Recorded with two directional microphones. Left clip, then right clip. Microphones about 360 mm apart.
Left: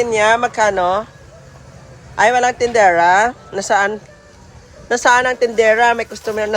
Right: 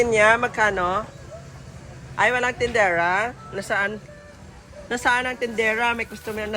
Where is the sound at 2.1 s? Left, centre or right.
Centre.